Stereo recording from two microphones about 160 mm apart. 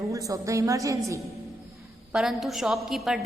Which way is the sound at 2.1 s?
5° right (ahead or behind).